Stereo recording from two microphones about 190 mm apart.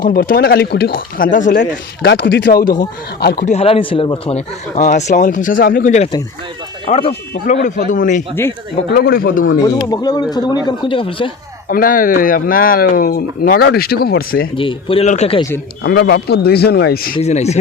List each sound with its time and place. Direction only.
0.0 s speech: 50° left (ahead or behind)
1.5 s speech: 60° left (ahead or behind)
3.4 s speech: 35° left (ahead or behind)
6.8 s speech: 30° left (ahead or behind)
7.1 s speech: 60° left (ahead or behind)
7.9 s speech: 40° left (ahead or behind)
9.6 s speech: 20° left (ahead or behind)
11.7 s speech: 45° left (ahead or behind)
14.5 s speech: 25° left (ahead or behind)
15.4 s speech: 15° left (ahead or behind)
15.8 s speech: 60° left (ahead or behind)
17.2 s speech: 35° left (ahead or behind)